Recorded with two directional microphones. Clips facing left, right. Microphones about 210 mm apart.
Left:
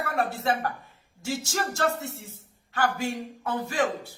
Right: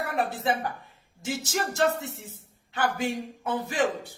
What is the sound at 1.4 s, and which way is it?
A man's voice, 20° right (ahead or behind).